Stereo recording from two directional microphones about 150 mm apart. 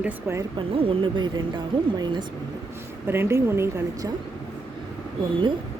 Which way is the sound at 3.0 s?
15° right (ahead or behind).